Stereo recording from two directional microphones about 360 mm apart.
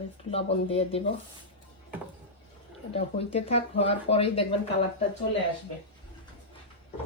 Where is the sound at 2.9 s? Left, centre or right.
Centre.